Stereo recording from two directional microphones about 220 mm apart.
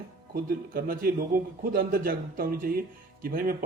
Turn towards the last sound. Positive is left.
turn(degrees=-40)  # may be behind; listen again after turning